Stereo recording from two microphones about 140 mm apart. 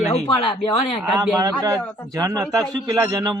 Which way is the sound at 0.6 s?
35° left (ahead or behind).